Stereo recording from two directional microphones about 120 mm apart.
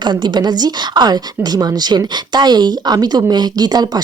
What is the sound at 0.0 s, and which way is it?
A woman's voice, 35° right (ahead or behind).